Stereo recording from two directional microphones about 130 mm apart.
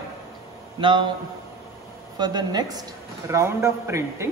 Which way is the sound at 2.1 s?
35° right (ahead or behind).